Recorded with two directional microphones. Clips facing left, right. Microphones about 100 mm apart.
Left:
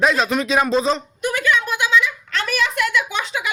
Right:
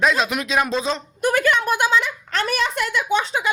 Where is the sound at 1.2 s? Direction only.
45° right (ahead or behind).